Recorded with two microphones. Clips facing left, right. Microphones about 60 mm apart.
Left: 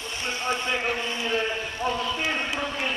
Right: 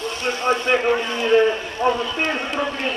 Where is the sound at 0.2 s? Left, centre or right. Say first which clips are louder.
Right 7 dB; right.